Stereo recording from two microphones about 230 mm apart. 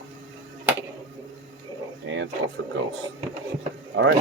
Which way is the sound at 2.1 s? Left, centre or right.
Right.